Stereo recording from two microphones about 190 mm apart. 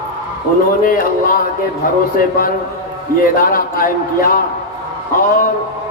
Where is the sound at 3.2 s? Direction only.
50° left (ahead or behind).